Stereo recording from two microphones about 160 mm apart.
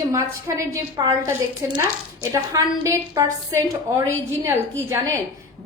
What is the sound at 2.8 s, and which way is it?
A woman's voice, 20° right (ahead or behind).